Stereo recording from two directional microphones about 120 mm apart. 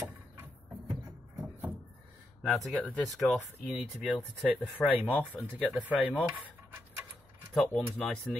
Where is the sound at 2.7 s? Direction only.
10° left (ahead or behind).